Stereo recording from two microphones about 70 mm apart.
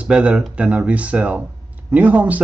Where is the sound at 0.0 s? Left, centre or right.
Centre.